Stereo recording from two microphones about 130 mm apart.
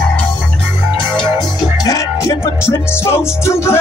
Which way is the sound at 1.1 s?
35° left (ahead or behind).